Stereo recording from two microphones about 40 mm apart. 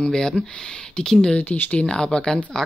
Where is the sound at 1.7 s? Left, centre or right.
Left.